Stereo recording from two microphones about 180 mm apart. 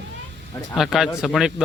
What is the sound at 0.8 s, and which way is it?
Speech, centre (ahead or behind).